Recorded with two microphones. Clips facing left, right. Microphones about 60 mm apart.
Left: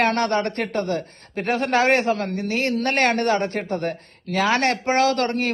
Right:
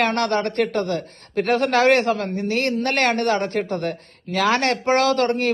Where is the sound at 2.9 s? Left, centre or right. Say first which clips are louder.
Left 2 dB; left.